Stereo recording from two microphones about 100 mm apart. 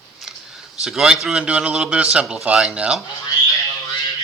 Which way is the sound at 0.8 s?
5° right (ahead or behind).